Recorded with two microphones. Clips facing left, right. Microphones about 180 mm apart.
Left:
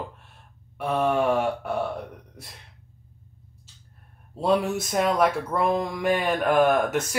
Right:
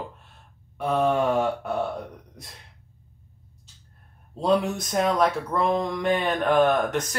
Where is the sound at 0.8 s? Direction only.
10° left (ahead or behind).